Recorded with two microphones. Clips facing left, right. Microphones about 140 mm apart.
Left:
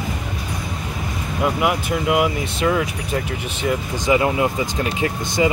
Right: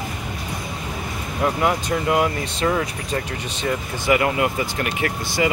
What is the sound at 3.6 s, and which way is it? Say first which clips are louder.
Speech: left 1 dB; 15° left (ahead or behind).